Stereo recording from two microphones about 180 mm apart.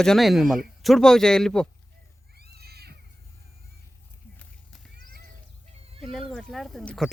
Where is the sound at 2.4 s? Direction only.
60° right (ahead or behind).